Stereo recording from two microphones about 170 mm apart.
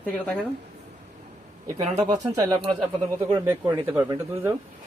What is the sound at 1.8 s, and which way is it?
Speech, 45° right (ahead or behind).